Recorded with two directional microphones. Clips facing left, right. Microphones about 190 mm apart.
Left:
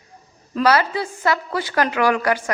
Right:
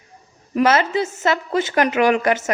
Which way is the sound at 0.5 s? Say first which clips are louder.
Right 1 dB; 20° right (ahead or behind).